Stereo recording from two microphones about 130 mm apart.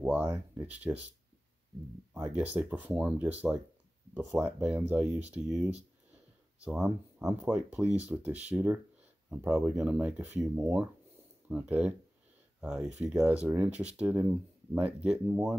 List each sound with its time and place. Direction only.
0.0 s speech: 10° right (ahead or behind)
2.3 s speech: 10° right (ahead or behind)